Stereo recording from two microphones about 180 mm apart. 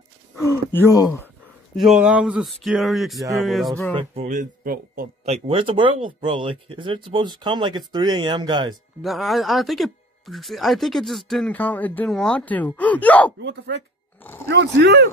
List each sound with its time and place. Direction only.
0.4 s speech: 15° left (ahead or behind)
1.8 s speech: 5° right (ahead or behind)
4.1 s speech: 40° right (ahead or behind)
5.2 s speech: 35° right (ahead or behind)
9.0 s speech: centre (ahead or behind)
13.4 s speech: 75° right (ahead or behind)
14.2 s speech: 10° left (ahead or behind)
14.5 s speech: 75° right (ahead or behind)